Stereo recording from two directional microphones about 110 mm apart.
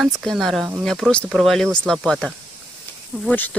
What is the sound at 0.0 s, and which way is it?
Speech, centre (ahead or behind).